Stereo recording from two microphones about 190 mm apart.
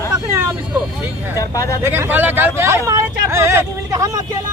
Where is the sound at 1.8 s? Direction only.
10° right (ahead or behind).